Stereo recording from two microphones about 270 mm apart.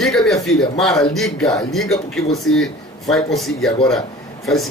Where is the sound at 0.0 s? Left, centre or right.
Centre.